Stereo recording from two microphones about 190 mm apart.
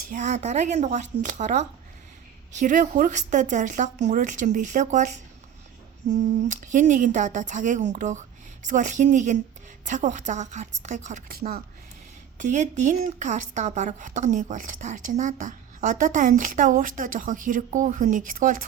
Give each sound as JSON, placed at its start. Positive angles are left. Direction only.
{"t": 0.1, "sound": "speech", "side_deg": -40}
{"t": 6.1, "sound": "speech", "side_deg": -40}
{"t": 11.3, "sound": "speech", "side_deg": -50}
{"t": 12.4, "sound": "speech", "side_deg": -40}